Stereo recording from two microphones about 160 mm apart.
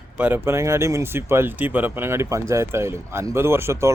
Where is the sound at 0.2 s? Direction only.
10° right (ahead or behind).